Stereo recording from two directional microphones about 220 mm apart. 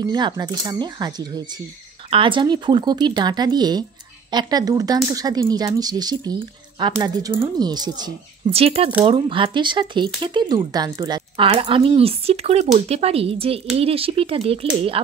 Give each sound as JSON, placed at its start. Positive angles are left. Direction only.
{"t": 0.0, "sound": "speech", "side_deg": -20}